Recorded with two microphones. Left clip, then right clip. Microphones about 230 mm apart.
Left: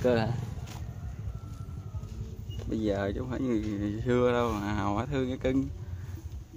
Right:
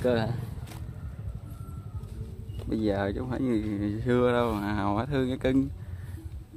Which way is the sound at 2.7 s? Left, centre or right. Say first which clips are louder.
Right 2 dB; right.